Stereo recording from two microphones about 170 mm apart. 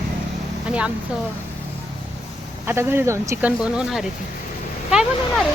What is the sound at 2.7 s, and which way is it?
Speech, 15° right (ahead or behind).